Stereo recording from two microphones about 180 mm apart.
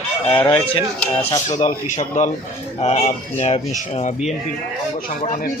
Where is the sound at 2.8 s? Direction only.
35° left (ahead or behind).